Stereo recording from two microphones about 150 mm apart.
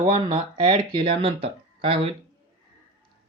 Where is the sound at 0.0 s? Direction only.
40° right (ahead or behind).